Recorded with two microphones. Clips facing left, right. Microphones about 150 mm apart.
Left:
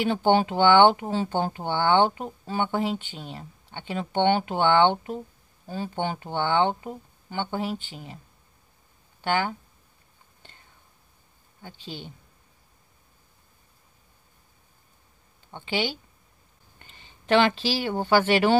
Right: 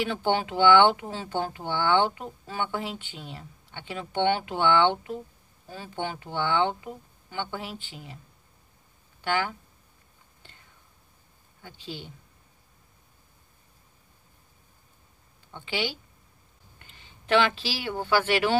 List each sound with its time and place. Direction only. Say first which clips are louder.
0.1 s speech: left 5 dB; 30° left (ahead or behind)
2.8 s speech: left 7 dB; 40° left (ahead or behind)
3.7 s speech: left 4 dB; 25° left (ahead or behind)
9.2 s speech: left 2 dB; 30° left (ahead or behind)
17.4 s speech: left 4 dB; 35° left (ahead or behind)